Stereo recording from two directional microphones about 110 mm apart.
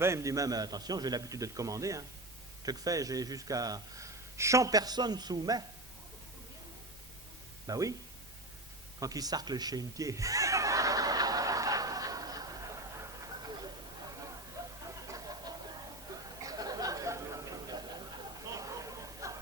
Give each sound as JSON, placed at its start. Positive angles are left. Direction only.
{"t": 0.0, "sound": "speech", "side_deg": -25}
{"t": 7.7, "sound": "speech", "side_deg": -30}
{"t": 9.0, "sound": "chuckle", "side_deg": -35}
{"t": 15.0, "sound": "a sound", "side_deg": -30}